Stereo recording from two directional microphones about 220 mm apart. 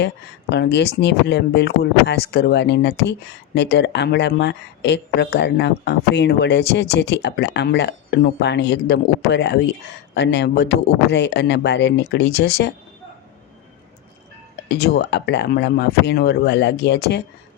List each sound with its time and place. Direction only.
0.5 s speech: 50° left (ahead or behind)
14.7 s speech: 45° left (ahead or behind)